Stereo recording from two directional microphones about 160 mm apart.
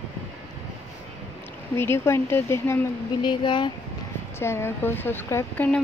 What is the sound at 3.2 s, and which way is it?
Speech, 30° left (ahead or behind).